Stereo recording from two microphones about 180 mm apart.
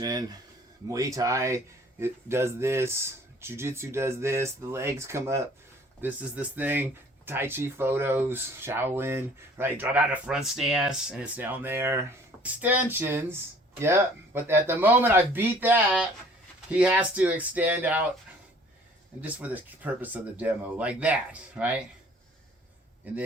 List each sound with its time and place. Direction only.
0.0 s speech: 20° right (ahead or behind)
19.2 s speech: 10° right (ahead or behind)
23.1 s speech: 10° right (ahead or behind)